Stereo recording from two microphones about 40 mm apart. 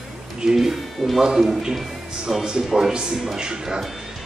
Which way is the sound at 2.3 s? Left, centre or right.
Centre.